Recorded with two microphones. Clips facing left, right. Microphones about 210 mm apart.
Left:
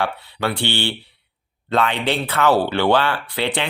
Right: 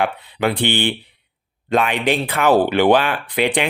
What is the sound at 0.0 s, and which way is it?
Speech, 15° right (ahead or behind).